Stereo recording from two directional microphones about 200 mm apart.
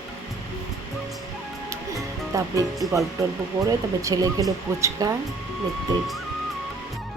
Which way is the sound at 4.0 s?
15° right (ahead or behind).